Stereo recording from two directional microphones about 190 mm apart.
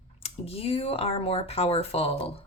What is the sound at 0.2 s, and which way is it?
Speech, 30° left (ahead or behind).